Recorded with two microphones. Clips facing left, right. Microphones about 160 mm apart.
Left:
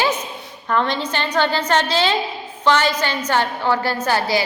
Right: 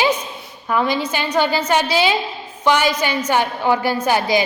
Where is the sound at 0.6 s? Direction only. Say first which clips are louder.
Right 1 dB; 10° right (ahead or behind).